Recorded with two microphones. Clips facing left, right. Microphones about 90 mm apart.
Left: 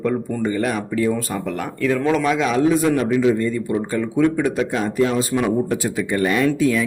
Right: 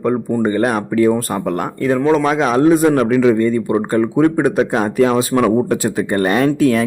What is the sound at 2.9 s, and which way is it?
Speech, 65° right (ahead or behind).